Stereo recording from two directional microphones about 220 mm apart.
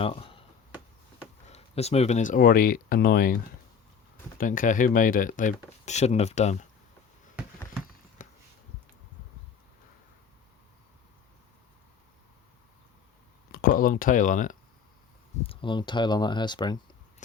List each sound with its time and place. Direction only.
0.0 s speech: 25° left (ahead or behind)
1.5 s speech: 30° left (ahead or behind)
4.4 s speech: 35° left (ahead or behind)
8.2 s a sound: 35° left (ahead or behind)
13.5 s speech: 40° left (ahead or behind)
15.4 s speech: 20° left (ahead or behind)